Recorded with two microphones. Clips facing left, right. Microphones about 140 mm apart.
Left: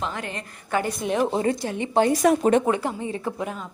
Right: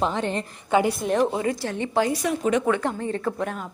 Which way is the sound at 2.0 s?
45° left (ahead or behind).